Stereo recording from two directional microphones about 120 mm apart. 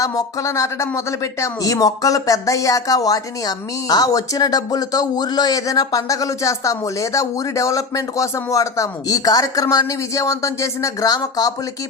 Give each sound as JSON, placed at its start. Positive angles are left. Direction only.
{"t": 0.0, "sound": "speech", "side_deg": 25}